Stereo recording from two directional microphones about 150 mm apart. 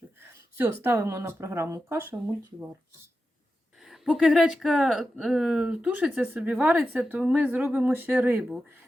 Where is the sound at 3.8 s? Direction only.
Centre (ahead or behind).